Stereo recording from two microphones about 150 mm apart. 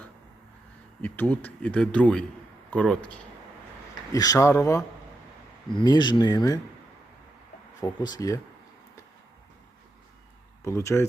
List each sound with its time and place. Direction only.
1.0 s speech: 10° left (ahead or behind)
4.1 s speech: 25° left (ahead or behind)
7.8 s speech: 30° left (ahead or behind)
10.6 s speech: 20° left (ahead or behind)